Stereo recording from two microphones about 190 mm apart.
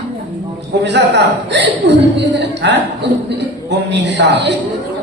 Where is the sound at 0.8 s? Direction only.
65° right (ahead or behind).